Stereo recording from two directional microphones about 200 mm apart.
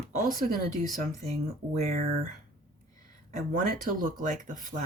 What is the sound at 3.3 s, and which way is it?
Speech, 40° right (ahead or behind).